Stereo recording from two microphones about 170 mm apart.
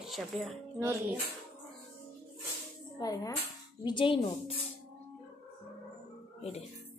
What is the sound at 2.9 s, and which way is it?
Speech, 20° left (ahead or behind).